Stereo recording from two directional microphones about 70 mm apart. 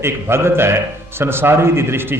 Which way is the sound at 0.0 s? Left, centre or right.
Right.